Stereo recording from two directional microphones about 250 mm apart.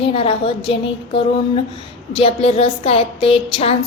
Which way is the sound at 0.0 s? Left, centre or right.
Left.